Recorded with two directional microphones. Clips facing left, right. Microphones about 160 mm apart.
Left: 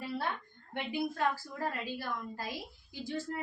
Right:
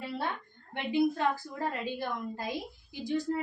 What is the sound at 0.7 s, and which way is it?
A woman's voice, 20° right (ahead or behind).